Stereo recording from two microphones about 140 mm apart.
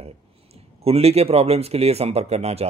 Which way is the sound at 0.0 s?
45° right (ahead or behind).